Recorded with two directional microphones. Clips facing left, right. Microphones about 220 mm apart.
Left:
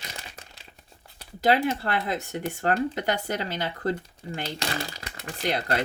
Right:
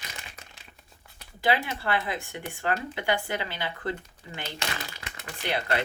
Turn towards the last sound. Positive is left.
turn(degrees=40)  # may be behind; listen again after turning